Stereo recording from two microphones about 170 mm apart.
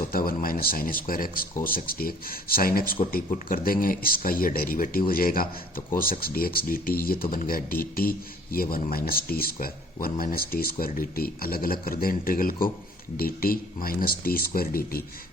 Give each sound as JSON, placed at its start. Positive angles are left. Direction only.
{"t": 0.1, "sound": "speech", "side_deg": 60}